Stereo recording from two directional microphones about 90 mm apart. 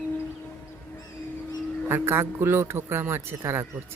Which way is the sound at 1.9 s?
25° right (ahead or behind).